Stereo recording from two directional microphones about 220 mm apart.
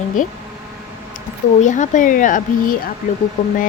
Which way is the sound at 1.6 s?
35° left (ahead or behind).